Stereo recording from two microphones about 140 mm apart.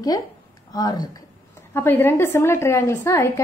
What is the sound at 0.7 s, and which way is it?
Speech, 25° left (ahead or behind).